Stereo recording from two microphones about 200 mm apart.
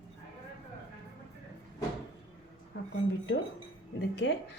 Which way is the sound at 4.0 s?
60° left (ahead or behind).